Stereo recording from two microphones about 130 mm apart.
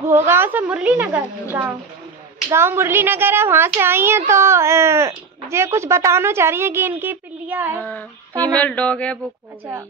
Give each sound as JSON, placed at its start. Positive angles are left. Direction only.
{"t": 0.0, "sound": "a woman's voice", "side_deg": -20}
{"t": 8.5, "sound": "speech", "side_deg": 10}